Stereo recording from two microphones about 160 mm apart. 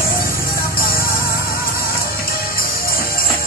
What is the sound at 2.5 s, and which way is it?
Music, 65° left (ahead or behind).